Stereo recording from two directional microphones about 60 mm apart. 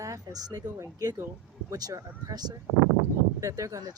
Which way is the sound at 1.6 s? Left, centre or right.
Right.